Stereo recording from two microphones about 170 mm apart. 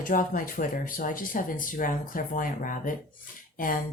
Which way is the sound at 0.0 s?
55° left (ahead or behind).